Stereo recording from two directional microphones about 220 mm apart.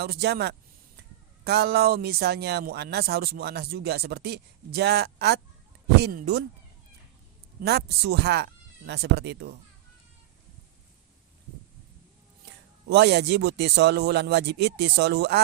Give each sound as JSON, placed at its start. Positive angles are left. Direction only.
{"t": 0.0, "sound": "speech", "side_deg": -45}
{"t": 7.6, "sound": "speech", "side_deg": -50}
{"t": 12.5, "sound": "speech", "side_deg": -50}